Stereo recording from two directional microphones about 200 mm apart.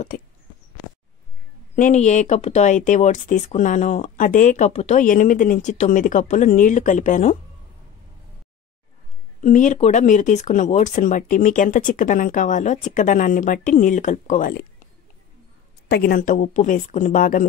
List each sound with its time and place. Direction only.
0.1 s speech: 45° left (ahead or behind)
1.8 s speech: 35° left (ahead or behind)
9.4 s speech: 40° left (ahead or behind)
15.9 s speech: 45° left (ahead or behind)